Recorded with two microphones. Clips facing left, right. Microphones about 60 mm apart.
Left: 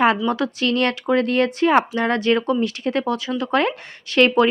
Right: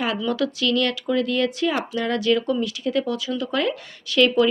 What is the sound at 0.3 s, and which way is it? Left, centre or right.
Speech, left.